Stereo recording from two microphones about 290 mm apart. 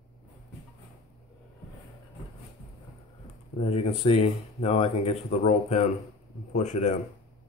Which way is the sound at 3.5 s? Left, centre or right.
Left.